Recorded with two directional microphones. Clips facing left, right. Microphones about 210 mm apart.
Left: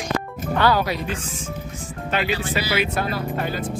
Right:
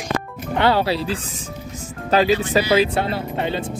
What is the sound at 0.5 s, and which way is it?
Speech, 25° right (ahead or behind).